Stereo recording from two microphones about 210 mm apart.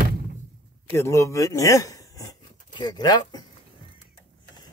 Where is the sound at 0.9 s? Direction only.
15° left (ahead or behind).